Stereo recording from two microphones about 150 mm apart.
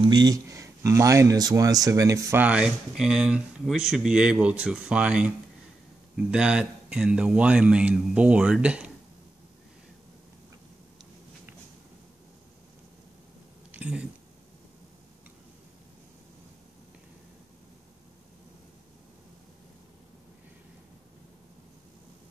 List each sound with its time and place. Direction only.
0.0 s speech: 30° right (ahead or behind)
2.4 s speech: 5° right (ahead or behind)
13.7 s a sound: 10° right (ahead or behind)